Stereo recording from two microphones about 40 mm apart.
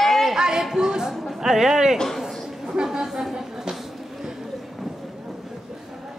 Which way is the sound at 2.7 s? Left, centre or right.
Centre.